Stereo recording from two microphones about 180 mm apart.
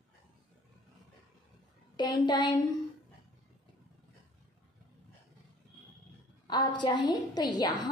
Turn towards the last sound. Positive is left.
turn(degrees=20)  # may be behind; listen again after turning